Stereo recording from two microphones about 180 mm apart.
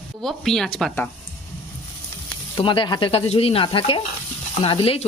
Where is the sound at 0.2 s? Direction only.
Centre (ahead or behind).